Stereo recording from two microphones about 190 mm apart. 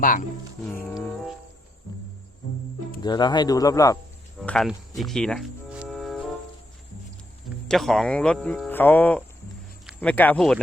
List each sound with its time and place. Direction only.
0.0 s speech: 45° left (ahead or behind)
0.6 s music: 10° left (ahead or behind)
3.0 s speech: 20° left (ahead or behind)
4.4 s music: 5° left (ahead or behind)
7.7 s speech: centre (ahead or behind)